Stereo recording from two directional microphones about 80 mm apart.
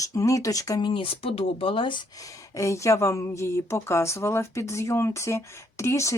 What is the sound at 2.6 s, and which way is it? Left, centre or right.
Speech, left.